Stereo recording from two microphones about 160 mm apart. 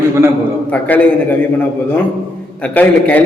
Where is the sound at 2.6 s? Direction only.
10° left (ahead or behind).